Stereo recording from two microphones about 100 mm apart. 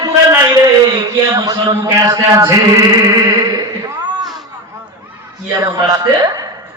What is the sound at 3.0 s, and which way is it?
Music, 40° right (ahead or behind).